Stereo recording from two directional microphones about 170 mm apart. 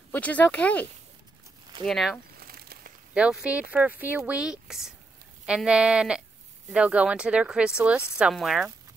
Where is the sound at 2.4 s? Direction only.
60° right (ahead or behind).